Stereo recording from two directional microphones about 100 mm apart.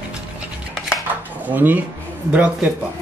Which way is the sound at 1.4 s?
15° right (ahead or behind).